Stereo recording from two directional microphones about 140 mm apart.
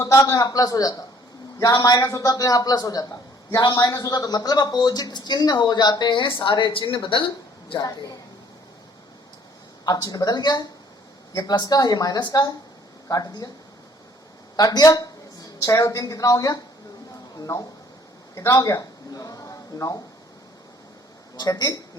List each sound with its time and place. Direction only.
0.0 s a man's voice: 20° left (ahead or behind); by 7.9 s 40° left (ahead or behind)
9.8 s a man's voice: 25° left (ahead or behind)
14.5 s a man's voice: 30° left (ahead or behind)
21.3 s a man's voice: 30° left (ahead or behind)